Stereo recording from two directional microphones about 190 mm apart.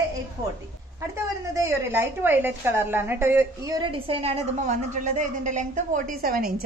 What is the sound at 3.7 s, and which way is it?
A woman's voice, 30° right (ahead or behind).